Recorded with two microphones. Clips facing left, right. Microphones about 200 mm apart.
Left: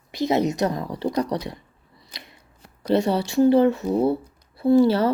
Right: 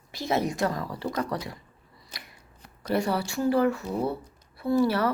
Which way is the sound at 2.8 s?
25° left (ahead or behind).